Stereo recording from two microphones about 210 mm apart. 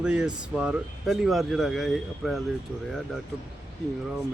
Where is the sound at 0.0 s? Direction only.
5° right (ahead or behind).